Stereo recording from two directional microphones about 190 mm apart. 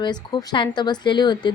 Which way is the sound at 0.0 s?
25° left (ahead or behind).